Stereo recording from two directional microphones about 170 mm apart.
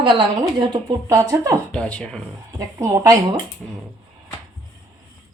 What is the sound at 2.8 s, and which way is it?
Speech, 15° right (ahead or behind).